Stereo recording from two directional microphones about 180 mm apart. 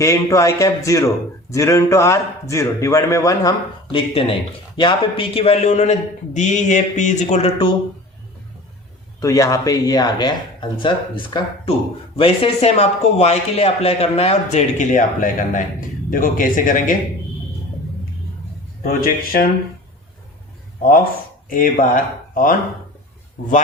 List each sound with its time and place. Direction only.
0.0 s a man's voice: 15° left (ahead or behind)
3.9 s speech: 30° left (ahead or behind)
9.2 s speech: 20° left (ahead or behind); by 16.9 s 50° left (ahead or behind)
18.8 s speech: 50° left (ahead or behind)
21.5 s speech: 50° left (ahead or behind)